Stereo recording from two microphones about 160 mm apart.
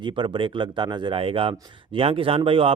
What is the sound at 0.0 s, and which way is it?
Speech, 30° right (ahead or behind).